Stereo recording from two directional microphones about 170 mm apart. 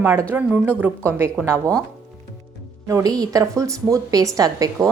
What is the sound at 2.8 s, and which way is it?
A woman's voice, 20° right (ahead or behind).